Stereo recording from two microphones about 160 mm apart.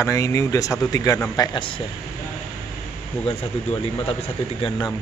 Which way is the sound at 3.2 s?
35° left (ahead or behind).